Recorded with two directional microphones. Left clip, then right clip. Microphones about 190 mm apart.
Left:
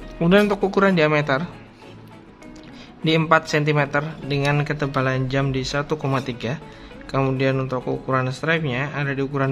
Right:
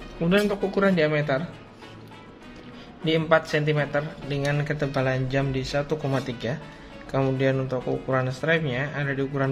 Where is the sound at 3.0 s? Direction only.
20° left (ahead or behind).